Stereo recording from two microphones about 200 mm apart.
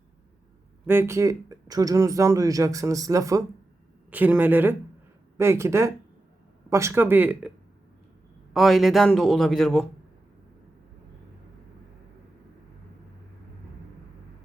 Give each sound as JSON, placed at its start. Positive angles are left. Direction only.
{"t": 0.9, "sound": "speech", "side_deg": -10}
{"t": 8.5, "sound": "a man's voice", "side_deg": 0}